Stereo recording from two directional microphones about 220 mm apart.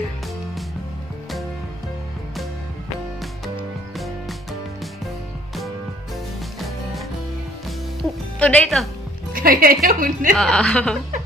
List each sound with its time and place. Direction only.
8.0 s speech: 5° left (ahead or behind)
9.3 s a woman's voice: 40° right (ahead or behind)
10.3 s a woman's voice: 5° left (ahead or behind)